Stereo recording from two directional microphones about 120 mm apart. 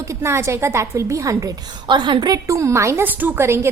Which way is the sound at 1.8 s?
40° right (ahead or behind).